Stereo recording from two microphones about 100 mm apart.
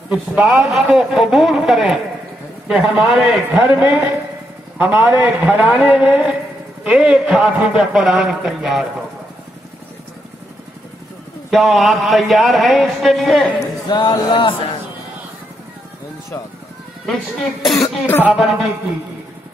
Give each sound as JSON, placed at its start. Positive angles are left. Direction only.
{"t": 0.1, "sound": "a man's voice", "side_deg": -10}
{"t": 11.5, "sound": "speech", "side_deg": 0}
{"t": 13.8, "sound": "speech", "side_deg": 50}
{"t": 17.0, "sound": "speech", "side_deg": 5}